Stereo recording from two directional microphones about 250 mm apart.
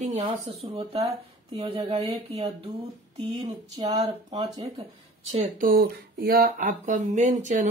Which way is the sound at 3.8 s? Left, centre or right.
Centre.